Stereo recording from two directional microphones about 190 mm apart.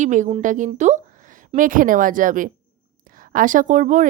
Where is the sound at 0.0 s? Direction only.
40° right (ahead or behind).